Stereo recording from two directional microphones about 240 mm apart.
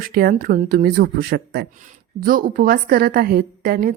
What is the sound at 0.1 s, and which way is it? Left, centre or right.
A woman's voice, right.